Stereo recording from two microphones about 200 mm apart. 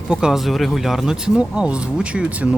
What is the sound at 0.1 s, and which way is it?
Speech, 5° right (ahead or behind).